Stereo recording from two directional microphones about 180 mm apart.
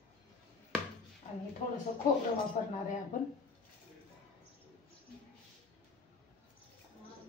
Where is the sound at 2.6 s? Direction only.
45° left (ahead or behind).